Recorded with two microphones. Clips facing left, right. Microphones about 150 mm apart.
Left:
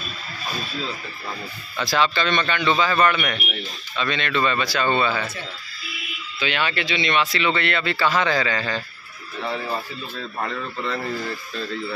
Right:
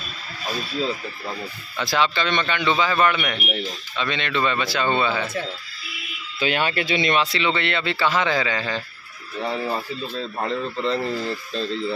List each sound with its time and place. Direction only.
1.8 s a man's voice: 20° right (ahead or behind)
6.4 s speech: 40° right (ahead or behind)
7.2 s a man's voice: 30° right (ahead or behind)
10.1 s a man's voice: 30° right (ahead or behind)